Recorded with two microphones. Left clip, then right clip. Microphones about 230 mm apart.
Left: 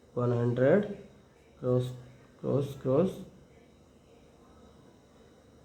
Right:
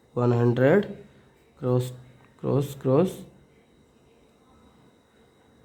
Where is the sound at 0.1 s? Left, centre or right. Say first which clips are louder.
Right 7 dB; right.